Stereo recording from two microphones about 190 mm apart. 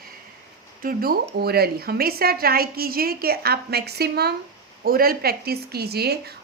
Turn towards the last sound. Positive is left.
turn(degrees=-55)  # may be behind; listen again after turning